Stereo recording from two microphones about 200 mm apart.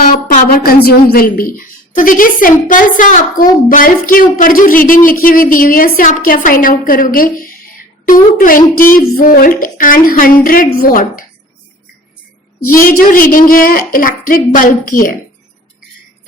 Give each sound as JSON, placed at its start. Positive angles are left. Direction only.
{"t": 0.1, "sound": "a woman's voice", "side_deg": 40}
{"t": 12.6, "sound": "a woman's voice", "side_deg": 45}